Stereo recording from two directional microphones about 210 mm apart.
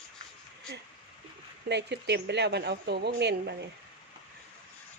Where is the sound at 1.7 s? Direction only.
55° right (ahead or behind).